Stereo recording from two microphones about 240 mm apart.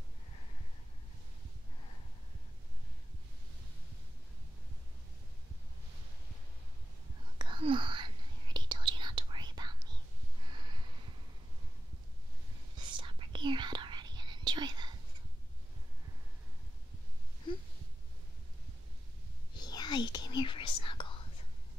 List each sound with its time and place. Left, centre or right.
7.3 s whispering: centre
10.4 s a sound: centre
12.7 s whispering: centre
19.5 s whispering: centre